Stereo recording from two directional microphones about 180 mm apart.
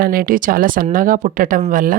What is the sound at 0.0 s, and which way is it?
Speech, 55° right (ahead or behind).